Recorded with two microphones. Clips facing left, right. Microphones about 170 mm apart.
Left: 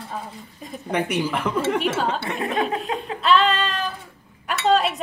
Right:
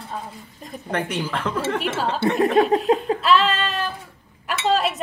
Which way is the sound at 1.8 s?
Centre (ahead or behind).